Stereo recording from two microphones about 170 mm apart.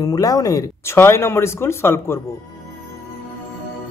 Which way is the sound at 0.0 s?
20° left (ahead or behind).